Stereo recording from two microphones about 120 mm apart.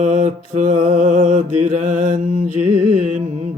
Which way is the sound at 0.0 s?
85° right.